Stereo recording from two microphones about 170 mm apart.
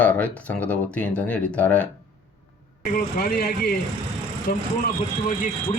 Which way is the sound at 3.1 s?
60° left (ahead or behind).